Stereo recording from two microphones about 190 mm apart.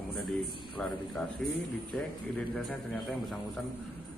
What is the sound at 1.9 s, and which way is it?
Speech, 5° left (ahead or behind).